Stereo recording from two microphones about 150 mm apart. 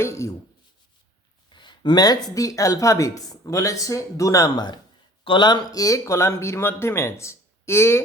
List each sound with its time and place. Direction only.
0.0 s speech: 20° left (ahead or behind)
1.5 s speech: 30° left (ahead or behind)